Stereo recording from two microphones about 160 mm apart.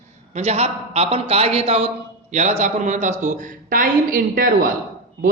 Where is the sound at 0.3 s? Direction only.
40° right (ahead or behind).